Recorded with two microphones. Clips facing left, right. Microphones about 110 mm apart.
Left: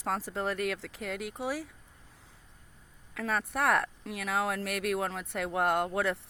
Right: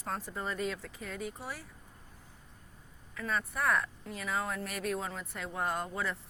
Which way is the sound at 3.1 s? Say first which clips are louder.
Left 3 dB; 80° left.